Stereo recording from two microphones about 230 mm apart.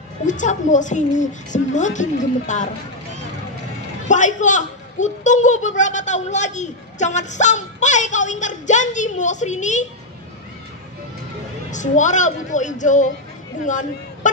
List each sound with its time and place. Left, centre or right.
0.2 s a woman's voice: left
4.1 s a woman's voice: left
11.7 s a woman's voice: left